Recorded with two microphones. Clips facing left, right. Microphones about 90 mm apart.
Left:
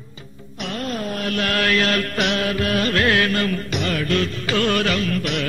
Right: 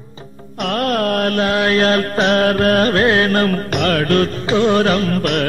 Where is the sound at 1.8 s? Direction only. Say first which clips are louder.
Right 6 dB; 35° right (ahead or behind); by 4.3 s 50° right (ahead or behind).